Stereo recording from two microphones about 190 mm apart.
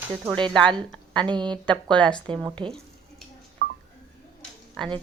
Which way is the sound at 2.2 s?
25° right (ahead or behind).